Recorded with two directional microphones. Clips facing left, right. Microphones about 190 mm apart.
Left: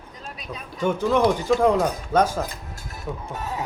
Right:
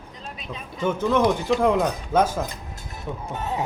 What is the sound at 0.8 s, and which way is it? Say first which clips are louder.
Speech: left 1 dB; centre (ahead or behind).